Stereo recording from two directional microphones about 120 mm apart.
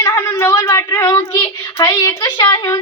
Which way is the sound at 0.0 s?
30° left (ahead or behind).